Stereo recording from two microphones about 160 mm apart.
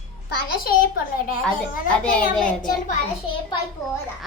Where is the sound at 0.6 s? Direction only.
65° left (ahead or behind).